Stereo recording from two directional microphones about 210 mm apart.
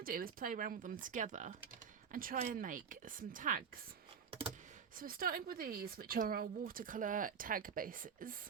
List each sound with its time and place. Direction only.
0.0 s speech: 40° right (ahead or behind)
4.9 s speech: 45° right (ahead or behind)